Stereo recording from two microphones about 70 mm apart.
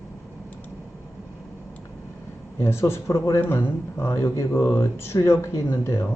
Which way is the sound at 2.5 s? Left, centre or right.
Left.